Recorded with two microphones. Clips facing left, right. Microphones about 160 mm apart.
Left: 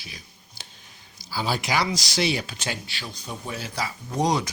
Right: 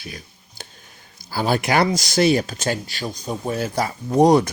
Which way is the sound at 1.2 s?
55° right (ahead or behind).